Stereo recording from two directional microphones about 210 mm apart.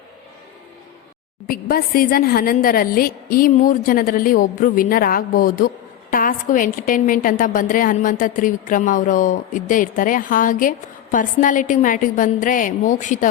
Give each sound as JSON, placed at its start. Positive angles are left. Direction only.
{"t": 1.5, "sound": "a woman's voice", "side_deg": 45}